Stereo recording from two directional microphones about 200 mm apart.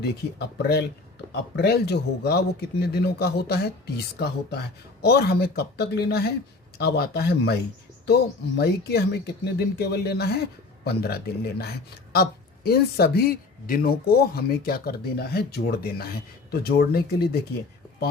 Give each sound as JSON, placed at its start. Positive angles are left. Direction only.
{"t": 0.0, "sound": "speech", "side_deg": 55}